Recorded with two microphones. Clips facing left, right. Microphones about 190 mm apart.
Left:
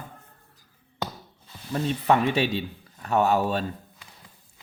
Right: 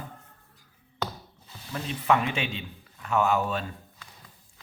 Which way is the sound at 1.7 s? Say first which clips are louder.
Left 3 dB; 35° left (ahead or behind).